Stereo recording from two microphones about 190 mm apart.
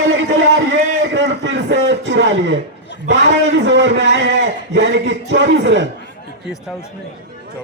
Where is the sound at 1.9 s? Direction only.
75° right (ahead or behind).